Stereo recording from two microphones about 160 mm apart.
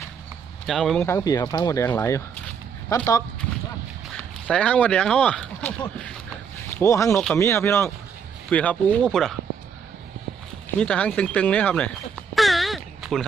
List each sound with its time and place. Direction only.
0.7 s speech: centre (ahead or behind)
0.9 s speech: 15° left (ahead or behind)
4.4 s speech: 5° left (ahead or behind)
7.1 s speech: 5° left (ahead or behind)
7.3 s speech: 15° left (ahead or behind)
10.8 s speech: 5° left (ahead or behind)
12.3 s a sound: centre (ahead or behind)